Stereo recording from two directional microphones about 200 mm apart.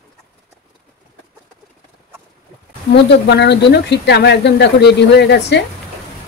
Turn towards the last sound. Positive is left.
turn(degrees=60)  # may be behind; listen again after turning